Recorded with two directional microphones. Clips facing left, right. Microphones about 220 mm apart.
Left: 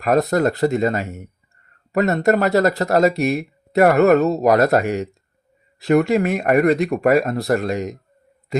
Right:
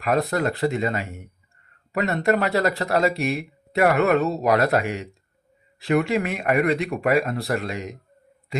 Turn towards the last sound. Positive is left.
turn(degrees=45)  # may be behind; listen again after turning